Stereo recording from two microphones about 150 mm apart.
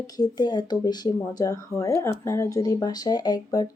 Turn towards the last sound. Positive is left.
turn(degrees=25)  # may be behind; listen again after turning